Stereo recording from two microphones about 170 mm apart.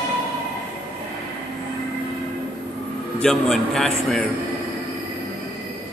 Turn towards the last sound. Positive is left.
turn(degrees=0)  # may be behind; listen again after turning